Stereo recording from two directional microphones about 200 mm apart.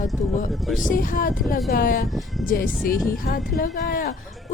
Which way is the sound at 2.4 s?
45° left (ahead or behind).